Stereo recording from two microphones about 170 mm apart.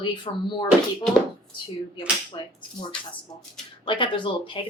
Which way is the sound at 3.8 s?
30° left (ahead or behind).